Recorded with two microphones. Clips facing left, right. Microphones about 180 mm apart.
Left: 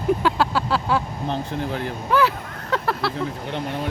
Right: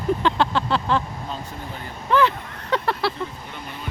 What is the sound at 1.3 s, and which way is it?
Speech, 70° left (ahead or behind).